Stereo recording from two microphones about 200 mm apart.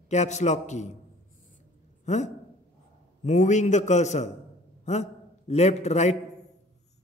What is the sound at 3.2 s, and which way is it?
A man's voice, 35° left (ahead or behind).